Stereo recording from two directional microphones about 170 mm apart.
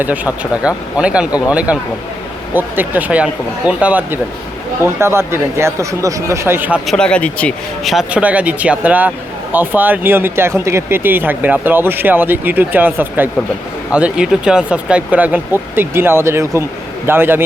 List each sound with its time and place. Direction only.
0.5 s speech: 5° right (ahead or behind)
6.8 s speech: 5° left (ahead or behind); by 17.4 s 15° right (ahead or behind)